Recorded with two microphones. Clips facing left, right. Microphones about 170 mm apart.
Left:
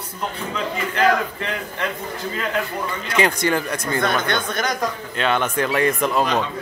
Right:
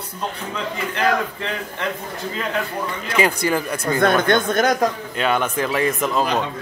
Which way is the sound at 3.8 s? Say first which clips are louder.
Right 4 dB; 50° right (ahead or behind).